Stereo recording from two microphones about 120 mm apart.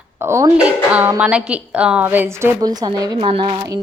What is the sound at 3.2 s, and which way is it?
Speech, 45° right (ahead or behind).